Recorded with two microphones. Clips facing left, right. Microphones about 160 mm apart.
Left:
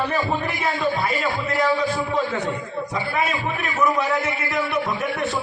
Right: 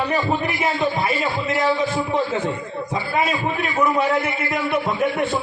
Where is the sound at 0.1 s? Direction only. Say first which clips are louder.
Right 2 dB; 15° right (ahead or behind).